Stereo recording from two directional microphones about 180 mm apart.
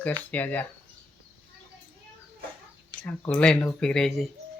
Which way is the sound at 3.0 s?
10° left (ahead or behind).